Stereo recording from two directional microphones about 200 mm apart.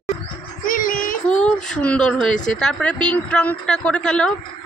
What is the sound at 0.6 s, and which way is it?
Child singing, 40° left (ahead or behind).